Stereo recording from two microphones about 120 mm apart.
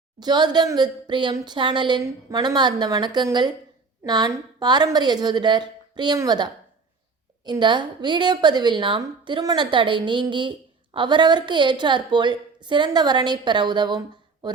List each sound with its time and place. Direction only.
0.2 s speech: 35° right (ahead or behind)
7.6 s speech: 40° right (ahead or behind)